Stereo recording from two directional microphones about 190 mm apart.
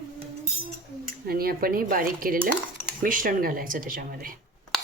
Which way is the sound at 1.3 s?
50° right (ahead or behind).